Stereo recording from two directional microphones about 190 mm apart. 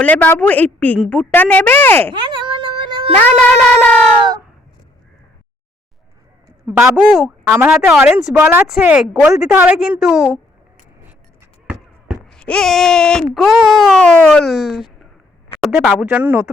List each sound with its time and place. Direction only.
0.0 s speech: 10° left (ahead or behind)
2.1 s a sound: 25° right (ahead or behind)
3.2 s speech: 5° left (ahead or behind)
6.7 s speech: 10° right (ahead or behind)
12.4 s speech: 5° left (ahead or behind)